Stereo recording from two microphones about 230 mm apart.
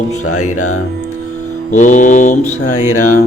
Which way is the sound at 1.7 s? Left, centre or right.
Left.